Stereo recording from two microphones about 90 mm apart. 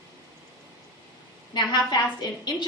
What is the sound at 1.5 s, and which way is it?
Speech, 50° left (ahead or behind).